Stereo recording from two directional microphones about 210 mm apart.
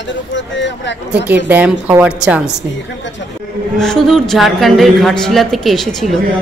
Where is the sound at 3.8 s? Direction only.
Centre (ahead or behind).